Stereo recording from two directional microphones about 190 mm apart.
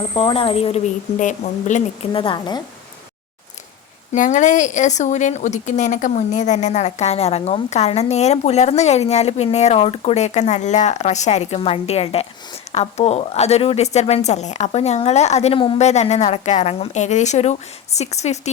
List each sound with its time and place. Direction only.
0.1 s a woman's voice: 25° left (ahead or behind)
2.1 s speech: 25° left (ahead or behind)
4.1 s a woman's voice: 40° left (ahead or behind)